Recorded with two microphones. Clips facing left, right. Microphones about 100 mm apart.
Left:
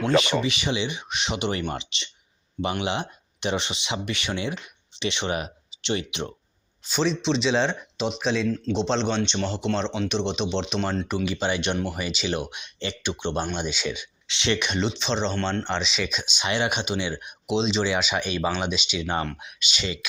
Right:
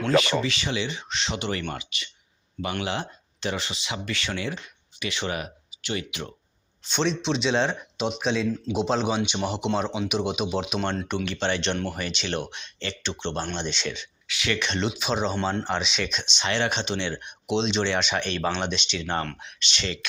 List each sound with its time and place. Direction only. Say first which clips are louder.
0.0 s speech: left 1 dB; 20° left (ahead or behind)
6.8 s speech: left 1 dB; centre (ahead or behind)
14.3 s speech: left 2 dB; 25° left (ahead or behind)
14.8 s speech: left 1 dB; 5° right (ahead or behind)